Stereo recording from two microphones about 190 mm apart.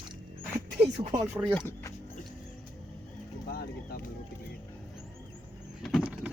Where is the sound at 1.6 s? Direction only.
15° left (ahead or behind).